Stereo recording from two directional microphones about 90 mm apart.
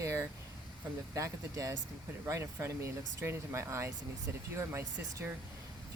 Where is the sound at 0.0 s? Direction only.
35° right (ahead or behind).